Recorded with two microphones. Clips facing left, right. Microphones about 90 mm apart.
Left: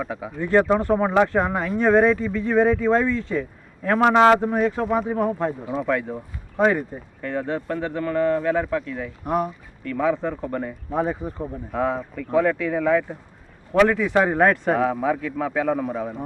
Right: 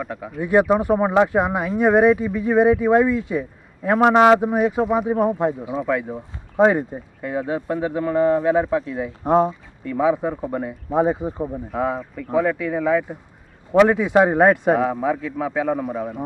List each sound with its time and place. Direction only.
0.0 s speech: centre (ahead or behind)
0.3 s speech: 15° right (ahead or behind)
5.9 s speech: 5° right (ahead or behind)
6.6 s speech: 20° right (ahead or behind)
11.7 s speech: 5° right (ahead or behind)
13.7 s speech: 20° right (ahead or behind)
14.8 s speech: 5° right (ahead or behind)